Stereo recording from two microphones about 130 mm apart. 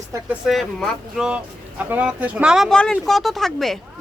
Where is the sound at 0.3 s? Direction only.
Centre (ahead or behind).